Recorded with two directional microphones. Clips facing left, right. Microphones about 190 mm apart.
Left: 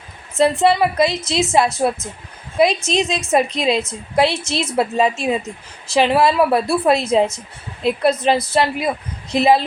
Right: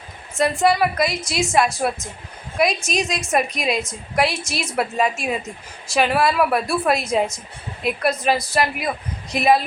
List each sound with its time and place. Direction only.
0.3 s a woman's voice: 25° left (ahead or behind)